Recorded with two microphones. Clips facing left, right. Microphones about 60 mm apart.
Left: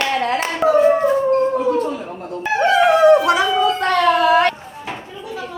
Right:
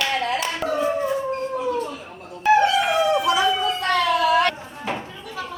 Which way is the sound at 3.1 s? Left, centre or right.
Left.